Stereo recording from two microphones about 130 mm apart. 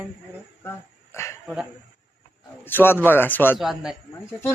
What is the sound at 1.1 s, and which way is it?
Speech, 20° left (ahead or behind).